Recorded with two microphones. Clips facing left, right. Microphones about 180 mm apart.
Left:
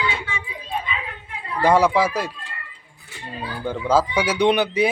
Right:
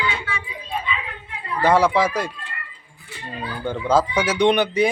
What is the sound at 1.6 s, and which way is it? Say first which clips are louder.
Speech: even; 10° left (ahead or behind).